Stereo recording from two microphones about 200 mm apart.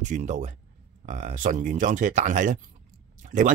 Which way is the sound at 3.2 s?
40° right (ahead or behind).